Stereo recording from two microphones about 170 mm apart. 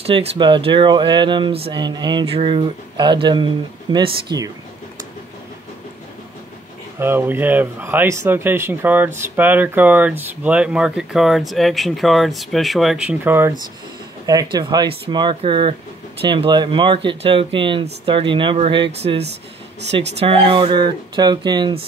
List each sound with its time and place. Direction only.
0.0 s speech: 35° right (ahead or behind)
7.0 s speech: 10° right (ahead or behind); by 19.2 s 35° right (ahead or behind)
19.8 s speech: 90° right
20.2 s speech: 30° right (ahead or behind)